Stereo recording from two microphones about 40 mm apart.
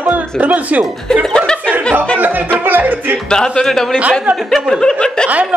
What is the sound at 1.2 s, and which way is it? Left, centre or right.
Chuckle, centre.